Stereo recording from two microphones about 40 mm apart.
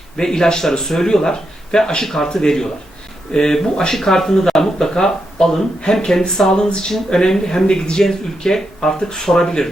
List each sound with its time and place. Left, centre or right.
0.2 s speech: centre